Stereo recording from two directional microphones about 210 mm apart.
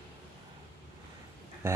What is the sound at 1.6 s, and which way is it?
Speech, 10° right (ahead or behind).